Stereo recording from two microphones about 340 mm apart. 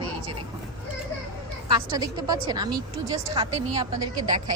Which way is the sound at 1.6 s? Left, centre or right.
Centre.